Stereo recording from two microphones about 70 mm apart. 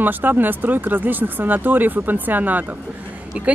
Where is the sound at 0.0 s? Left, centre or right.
Right.